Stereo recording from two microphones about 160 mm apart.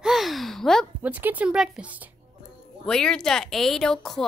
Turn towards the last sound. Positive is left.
turn(degrees=0)  # may be behind; listen again after turning